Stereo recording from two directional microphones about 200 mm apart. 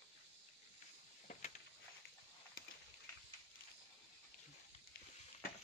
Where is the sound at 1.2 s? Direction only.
40° left (ahead or behind).